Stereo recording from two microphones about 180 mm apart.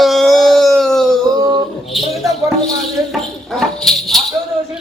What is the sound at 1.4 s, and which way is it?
Speech, 20° right (ahead or behind).